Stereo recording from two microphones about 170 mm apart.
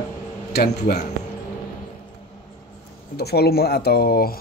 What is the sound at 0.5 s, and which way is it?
Speech, 70° left (ahead or behind).